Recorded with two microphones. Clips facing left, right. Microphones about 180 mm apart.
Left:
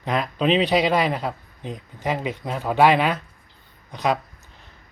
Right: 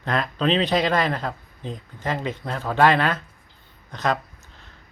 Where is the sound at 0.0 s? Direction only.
10° left (ahead or behind).